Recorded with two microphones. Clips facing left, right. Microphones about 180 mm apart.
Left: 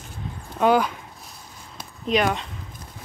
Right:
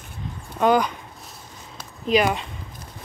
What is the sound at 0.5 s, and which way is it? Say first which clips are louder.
Speech: even; 5° left (ahead or behind).